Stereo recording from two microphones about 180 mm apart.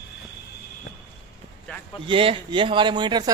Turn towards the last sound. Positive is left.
turn(degrees=-25)  # may be behind; listen again after turning